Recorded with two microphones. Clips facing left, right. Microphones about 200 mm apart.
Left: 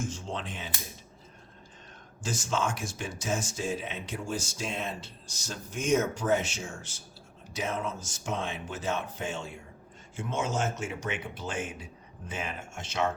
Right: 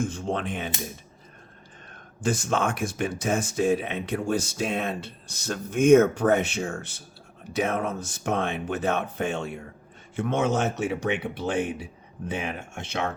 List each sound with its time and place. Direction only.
0.0 s speech: 55° right (ahead or behind)
1.9 s speech: 55° right (ahead or behind)